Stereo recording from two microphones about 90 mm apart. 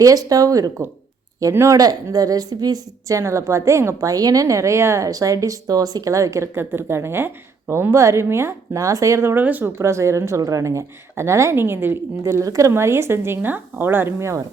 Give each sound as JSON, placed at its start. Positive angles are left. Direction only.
{"t": 0.0, "sound": "speech", "side_deg": -40}
{"t": 12.2, "sound": "speech", "side_deg": -35}